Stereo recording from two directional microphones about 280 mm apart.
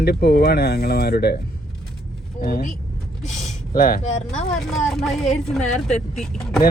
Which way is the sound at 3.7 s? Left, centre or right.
Left.